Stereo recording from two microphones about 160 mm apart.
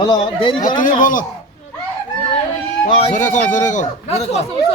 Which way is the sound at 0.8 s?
55° left (ahead or behind).